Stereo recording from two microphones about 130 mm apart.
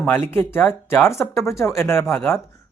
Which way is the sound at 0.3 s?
15° left (ahead or behind).